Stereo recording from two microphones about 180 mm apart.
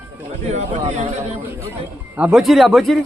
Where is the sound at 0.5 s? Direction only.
40° right (ahead or behind).